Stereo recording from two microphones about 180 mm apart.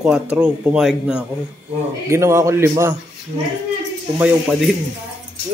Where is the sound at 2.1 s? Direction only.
15° right (ahead or behind).